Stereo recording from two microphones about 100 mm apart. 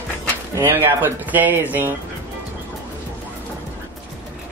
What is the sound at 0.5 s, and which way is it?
Speech, 20° right (ahead or behind).